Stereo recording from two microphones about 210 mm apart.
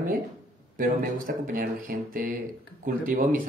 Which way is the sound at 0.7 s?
40° right (ahead or behind).